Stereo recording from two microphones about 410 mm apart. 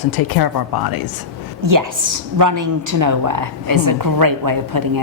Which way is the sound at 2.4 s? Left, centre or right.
Right.